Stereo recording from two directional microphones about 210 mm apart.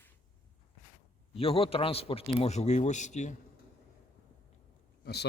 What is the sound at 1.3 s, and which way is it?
A man's voice, 25° left (ahead or behind).